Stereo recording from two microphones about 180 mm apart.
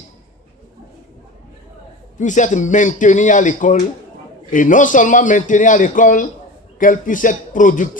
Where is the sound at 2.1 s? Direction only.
45° left (ahead or behind).